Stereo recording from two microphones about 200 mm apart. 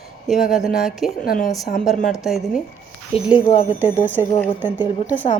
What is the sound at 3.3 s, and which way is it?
Speech, 30° left (ahead or behind).